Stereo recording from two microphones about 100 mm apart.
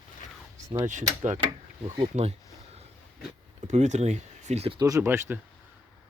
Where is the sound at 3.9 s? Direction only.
90° right.